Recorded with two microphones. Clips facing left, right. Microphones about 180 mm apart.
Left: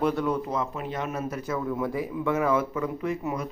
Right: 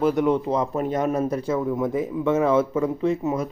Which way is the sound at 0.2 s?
25° right (ahead or behind).